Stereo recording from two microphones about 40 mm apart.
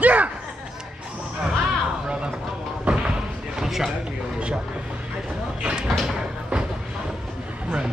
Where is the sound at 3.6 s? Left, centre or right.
Centre.